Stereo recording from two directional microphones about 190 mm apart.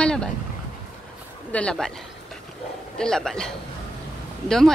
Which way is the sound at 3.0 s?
5° left (ahead or behind).